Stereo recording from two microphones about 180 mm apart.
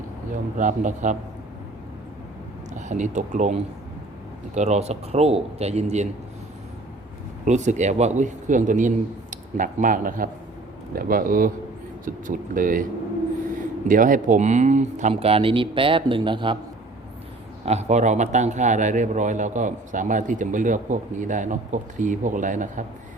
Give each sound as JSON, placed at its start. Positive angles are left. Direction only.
{"t": 0.5, "sound": "a man's voice", "side_deg": -45}
{"t": 2.7, "sound": "a man's voice", "side_deg": -40}
{"t": 4.5, "sound": "speech", "side_deg": -40}
{"t": 7.4, "sound": "a man's voice", "side_deg": -40}
{"t": 13.8, "sound": "speech", "side_deg": -45}
{"t": 17.7, "sound": "a man's voice", "side_deg": -40}